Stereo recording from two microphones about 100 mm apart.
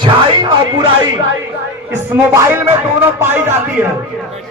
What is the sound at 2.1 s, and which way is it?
Speech, 20° right (ahead or behind).